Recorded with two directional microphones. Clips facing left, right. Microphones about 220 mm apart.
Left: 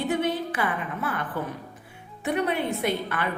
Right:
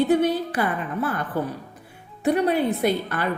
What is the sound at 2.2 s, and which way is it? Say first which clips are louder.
A woman's voice: right 5 dB; 35° right (ahead or behind).